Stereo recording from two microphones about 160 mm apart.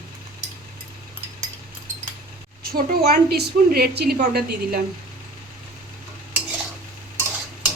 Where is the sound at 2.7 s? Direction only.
75° right (ahead or behind).